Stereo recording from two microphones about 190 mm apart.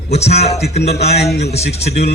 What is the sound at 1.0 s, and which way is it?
Speech, 60° left (ahead or behind).